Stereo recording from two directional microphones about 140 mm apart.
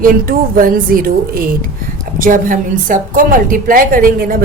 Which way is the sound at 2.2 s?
75° right (ahead or behind).